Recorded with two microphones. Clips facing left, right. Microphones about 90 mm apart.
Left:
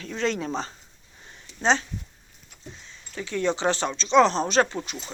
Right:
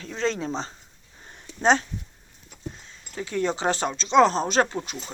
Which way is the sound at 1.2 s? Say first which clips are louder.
Right 3 dB; 50° right (ahead or behind).